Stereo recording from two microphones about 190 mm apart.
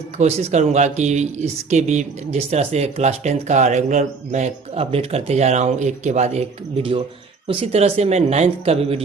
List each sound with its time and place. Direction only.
0.2 s speech: 35° right (ahead or behind)